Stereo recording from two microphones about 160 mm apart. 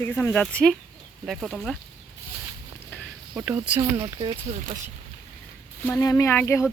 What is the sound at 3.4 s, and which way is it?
Speech, 10° right (ahead or behind).